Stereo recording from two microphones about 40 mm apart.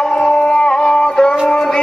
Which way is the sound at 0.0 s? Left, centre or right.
Left.